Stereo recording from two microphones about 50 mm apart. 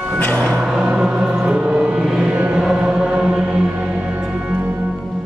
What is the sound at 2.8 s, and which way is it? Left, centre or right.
Chant, centre.